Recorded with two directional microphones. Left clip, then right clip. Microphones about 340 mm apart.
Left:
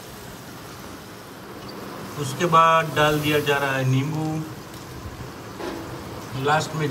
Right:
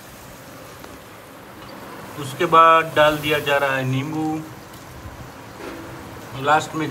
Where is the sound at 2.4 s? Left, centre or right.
Centre.